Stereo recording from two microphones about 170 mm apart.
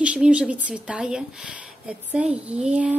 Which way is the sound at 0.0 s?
5° right (ahead or behind).